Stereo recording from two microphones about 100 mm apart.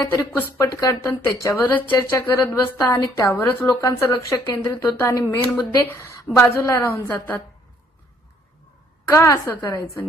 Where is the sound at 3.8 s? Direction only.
35° left (ahead or behind).